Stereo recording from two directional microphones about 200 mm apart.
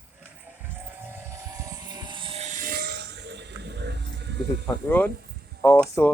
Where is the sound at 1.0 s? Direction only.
10° right (ahead or behind); by 4.4 s 55° right (ahead or behind).